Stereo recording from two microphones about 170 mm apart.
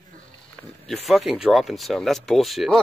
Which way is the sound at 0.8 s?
Centre (ahead or behind).